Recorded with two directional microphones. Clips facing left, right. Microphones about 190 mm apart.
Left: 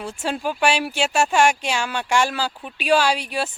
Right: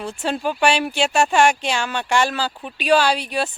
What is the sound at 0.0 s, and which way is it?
Speech, 10° left (ahead or behind).